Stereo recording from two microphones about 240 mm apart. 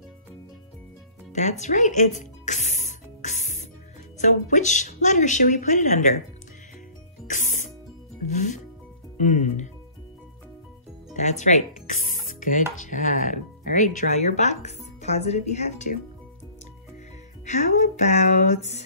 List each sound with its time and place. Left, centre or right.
1.3 s music: left
4.2 s speech: left
7.2 s music: left
8.3 s speech: left
9.2 s music: left
11.1 s music: left
12.8 s speech: left
15.0 s music: left
17.5 s music: left